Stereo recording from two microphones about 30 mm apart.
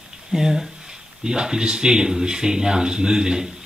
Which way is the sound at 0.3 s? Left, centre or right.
Centre.